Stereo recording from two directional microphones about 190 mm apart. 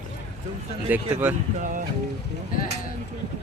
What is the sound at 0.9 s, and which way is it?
Speech, 10° right (ahead or behind).